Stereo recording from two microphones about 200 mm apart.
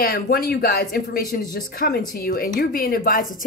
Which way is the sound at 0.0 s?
50° left (ahead or behind).